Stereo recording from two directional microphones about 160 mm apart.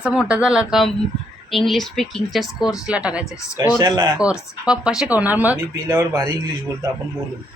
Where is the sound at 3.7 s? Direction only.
25° right (ahead or behind).